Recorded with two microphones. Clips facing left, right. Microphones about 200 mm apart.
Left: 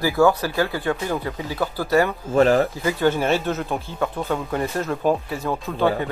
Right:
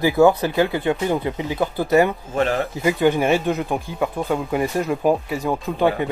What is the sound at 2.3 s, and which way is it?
Speech, 40° left (ahead or behind).